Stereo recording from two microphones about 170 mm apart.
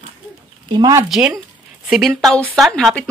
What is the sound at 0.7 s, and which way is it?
Speech, 20° right (ahead or behind).